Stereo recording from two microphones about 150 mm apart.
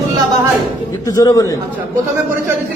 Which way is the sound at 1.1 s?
25° left (ahead or behind).